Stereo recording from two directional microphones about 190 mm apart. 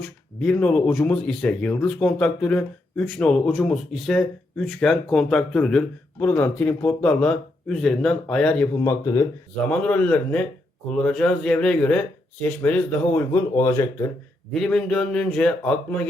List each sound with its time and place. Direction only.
0.0 s speech: 5° left (ahead or behind)
8.8 s speech: 15° left (ahead or behind)
9.6 s speech: 5° left (ahead or behind)
14.5 s speech: 5° left (ahead or behind)